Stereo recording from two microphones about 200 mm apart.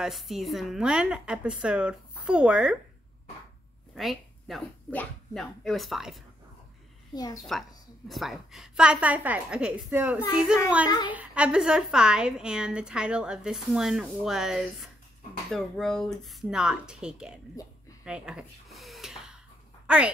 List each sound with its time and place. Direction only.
0.0 s a woman's voice: centre (ahead or behind)
3.9 s speech: centre (ahead or behind)
7.1 s a woman's voice: 20° left (ahead or behind)
7.5 s a woman's voice: centre (ahead or behind)
18.0 s snort: 5° right (ahead or behind)
19.9 s speech: 5° right (ahead or behind)